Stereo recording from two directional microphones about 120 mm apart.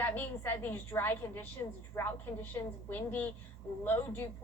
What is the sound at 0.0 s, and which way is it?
A woman's voice, 15° left (ahead or behind).